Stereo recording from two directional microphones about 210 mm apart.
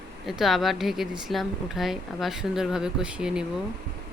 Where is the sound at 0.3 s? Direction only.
Centre (ahead or behind).